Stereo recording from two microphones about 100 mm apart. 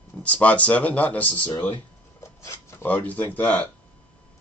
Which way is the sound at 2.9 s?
15° left (ahead or behind).